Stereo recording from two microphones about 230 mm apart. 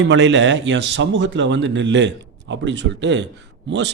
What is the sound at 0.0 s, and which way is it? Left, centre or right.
Speech, right.